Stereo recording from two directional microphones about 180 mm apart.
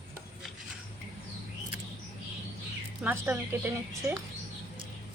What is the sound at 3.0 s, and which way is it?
A woman's voice, 10° right (ahead or behind).